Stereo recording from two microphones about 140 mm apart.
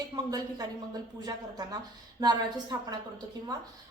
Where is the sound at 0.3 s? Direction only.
25° right (ahead or behind).